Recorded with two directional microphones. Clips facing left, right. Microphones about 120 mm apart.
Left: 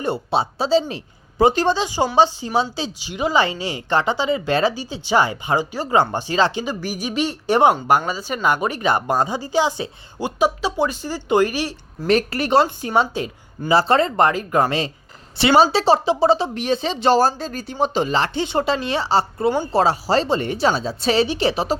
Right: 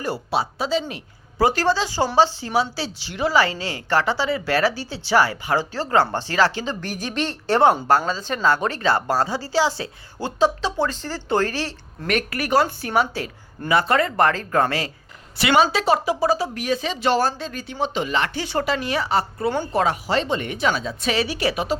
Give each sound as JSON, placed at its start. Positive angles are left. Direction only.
{"t": 0.0, "sound": "speech", "side_deg": 25}
{"t": 12.0, "sound": "speech", "side_deg": 30}